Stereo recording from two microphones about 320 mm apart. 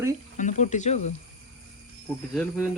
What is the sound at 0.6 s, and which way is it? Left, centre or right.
Speech, left.